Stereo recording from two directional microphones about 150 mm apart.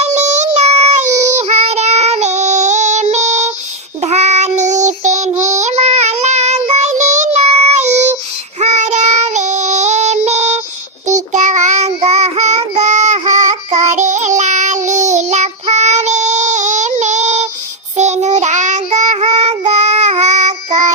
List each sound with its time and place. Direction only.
0.0 s child singing: 50° right (ahead or behind)